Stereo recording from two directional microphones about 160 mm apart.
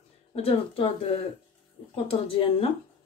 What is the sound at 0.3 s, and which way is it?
Speech, 35° left (ahead or behind).